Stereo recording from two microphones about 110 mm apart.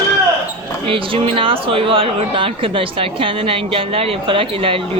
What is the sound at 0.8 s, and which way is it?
Speech, 55° right (ahead or behind).